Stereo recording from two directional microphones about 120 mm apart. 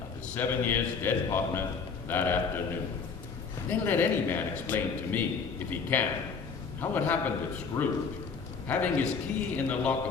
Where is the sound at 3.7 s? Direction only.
15° left (ahead or behind).